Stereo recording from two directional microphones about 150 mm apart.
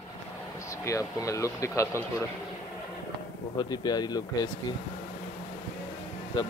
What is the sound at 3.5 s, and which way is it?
Speech, 25° left (ahead or behind).